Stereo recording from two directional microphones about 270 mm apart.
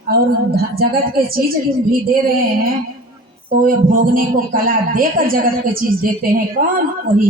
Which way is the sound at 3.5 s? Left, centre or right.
Right.